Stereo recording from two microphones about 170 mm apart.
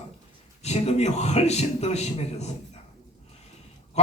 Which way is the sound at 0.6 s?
40° left (ahead or behind).